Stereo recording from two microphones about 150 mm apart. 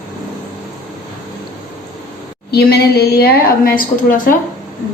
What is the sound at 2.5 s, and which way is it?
A woman's voice, 90° left.